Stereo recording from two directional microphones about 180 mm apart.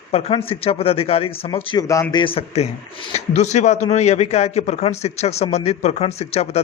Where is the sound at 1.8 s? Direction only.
15° left (ahead or behind); by 6.6 s 35° left (ahead or behind).